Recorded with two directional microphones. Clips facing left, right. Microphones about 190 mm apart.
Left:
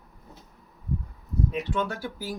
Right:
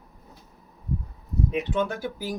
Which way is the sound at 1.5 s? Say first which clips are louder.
Right 4 dB; 20° right (ahead or behind).